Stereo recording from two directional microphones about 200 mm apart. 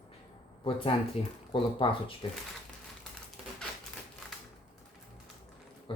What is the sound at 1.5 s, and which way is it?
Speech, 25° left (ahead or behind).